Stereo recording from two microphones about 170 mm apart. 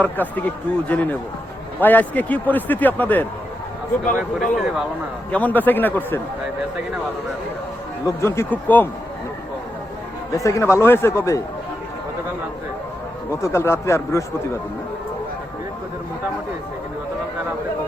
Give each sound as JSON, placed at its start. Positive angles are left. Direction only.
{"t": 0.0, "sound": "a man's voice", "side_deg": 10}
{"t": 4.5, "sound": "speech", "side_deg": 0}
{"t": 5.3, "sound": "a man's voice", "side_deg": 10}
{"t": 8.0, "sound": "a man's voice", "side_deg": 15}
{"t": 10.3, "sound": "a man's voice", "side_deg": 20}
{"t": 13.4, "sound": "a man's voice", "side_deg": 15}